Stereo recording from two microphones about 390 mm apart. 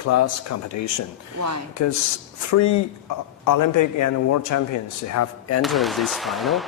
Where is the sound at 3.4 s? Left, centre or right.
Left.